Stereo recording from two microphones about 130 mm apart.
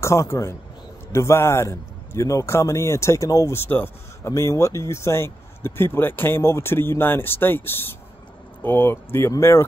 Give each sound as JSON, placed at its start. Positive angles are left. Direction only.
{"t": 0.0, "sound": "a man's voice", "side_deg": 20}